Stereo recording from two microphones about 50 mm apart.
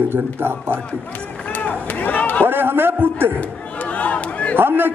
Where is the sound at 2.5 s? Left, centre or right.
Right.